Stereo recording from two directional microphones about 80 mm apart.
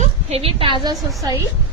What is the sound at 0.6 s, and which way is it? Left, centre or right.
Speech, right.